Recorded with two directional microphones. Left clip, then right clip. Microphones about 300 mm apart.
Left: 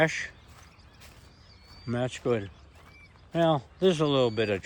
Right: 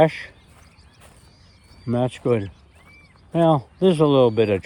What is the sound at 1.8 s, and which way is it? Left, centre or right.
Speech, centre.